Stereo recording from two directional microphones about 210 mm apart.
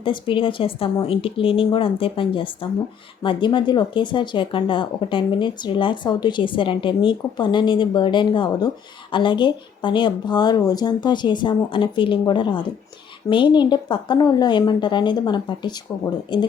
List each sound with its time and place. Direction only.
0.0 s speech: 25° left (ahead or behind)